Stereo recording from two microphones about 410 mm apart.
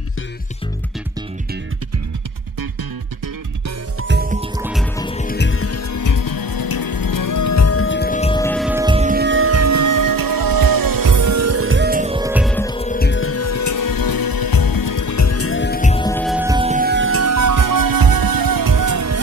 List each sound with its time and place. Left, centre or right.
4.1 s music: centre
4.6 s music: centre
4.9 s music: centre; by 5.8 s left
5.9 s music: left; by 19.2 s right